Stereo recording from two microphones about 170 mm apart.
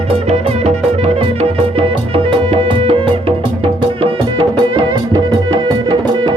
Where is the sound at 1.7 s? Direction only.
35° right (ahead or behind).